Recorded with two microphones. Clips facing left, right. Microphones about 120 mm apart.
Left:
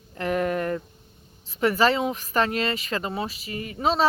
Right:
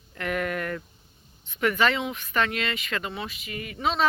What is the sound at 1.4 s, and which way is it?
Speech, 35° left (ahead or behind).